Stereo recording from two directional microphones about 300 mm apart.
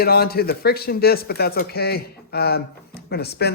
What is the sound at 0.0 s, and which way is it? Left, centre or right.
Speech, left.